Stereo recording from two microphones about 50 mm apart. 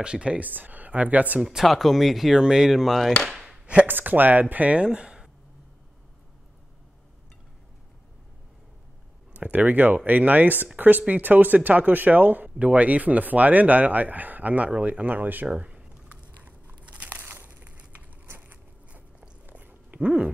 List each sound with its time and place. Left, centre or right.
0.0 s speech: right
0.5 s speech: right
1.4 s speech: centre
1.7 s speech: centre
3.3 s a sound: centre
3.8 s speech: right; by 5.3 s centre
9.3 s speech: right
15.4 s a sound: right
16.4 s biting: right
17.2 s crumpling: right
18.2 s biting: right
18.9 s biting: right